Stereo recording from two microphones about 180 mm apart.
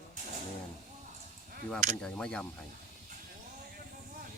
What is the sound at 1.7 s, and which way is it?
Speech, 5° left (ahead or behind).